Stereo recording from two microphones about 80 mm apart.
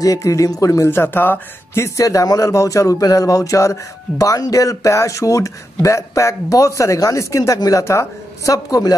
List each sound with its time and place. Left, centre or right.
0.0 s speech: left
0.8 s speech: left
2.0 s speech: left
8.6 s speech: left